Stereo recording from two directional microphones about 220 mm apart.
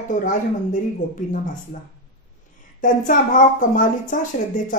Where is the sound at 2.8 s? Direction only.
35° left (ahead or behind).